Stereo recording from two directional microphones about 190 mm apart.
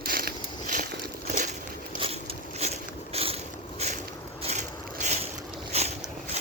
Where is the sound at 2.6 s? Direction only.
35° right (ahead or behind).